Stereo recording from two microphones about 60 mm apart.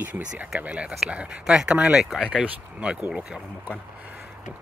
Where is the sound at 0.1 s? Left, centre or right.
Centre.